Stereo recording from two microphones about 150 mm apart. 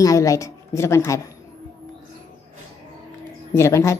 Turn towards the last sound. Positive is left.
turn(degrees=20)  # may be behind; listen again after turning